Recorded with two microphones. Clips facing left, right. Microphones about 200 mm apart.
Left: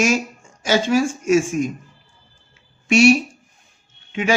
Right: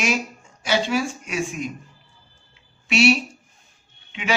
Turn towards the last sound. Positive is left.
turn(degrees=45)  # may be behind; listen again after turning